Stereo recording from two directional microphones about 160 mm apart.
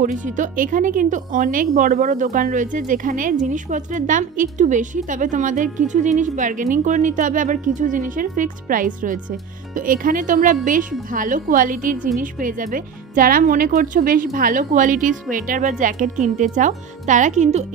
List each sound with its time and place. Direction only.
0.0 s speech: 55° right (ahead or behind)